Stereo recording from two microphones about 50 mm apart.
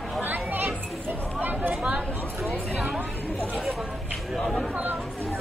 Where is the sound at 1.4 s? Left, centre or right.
Right.